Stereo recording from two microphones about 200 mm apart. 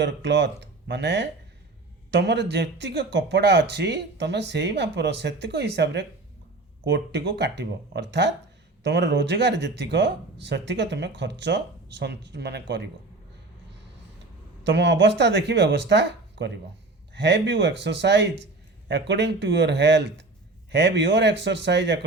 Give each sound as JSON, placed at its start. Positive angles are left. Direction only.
{"t": 0.0, "sound": "speech", "side_deg": -60}
{"t": 14.6, "sound": "speech", "side_deg": -60}